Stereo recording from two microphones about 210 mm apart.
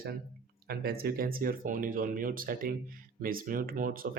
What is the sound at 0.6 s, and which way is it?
Speech, 45° right (ahead or behind).